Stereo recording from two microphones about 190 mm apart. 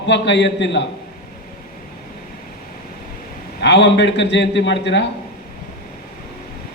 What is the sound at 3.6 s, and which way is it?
A man's voice, 65° left (ahead or behind).